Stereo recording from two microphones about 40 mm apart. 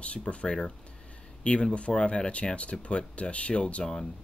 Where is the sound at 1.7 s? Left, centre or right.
Left.